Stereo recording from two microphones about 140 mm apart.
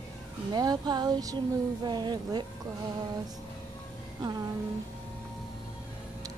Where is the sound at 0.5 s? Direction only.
30° right (ahead or behind).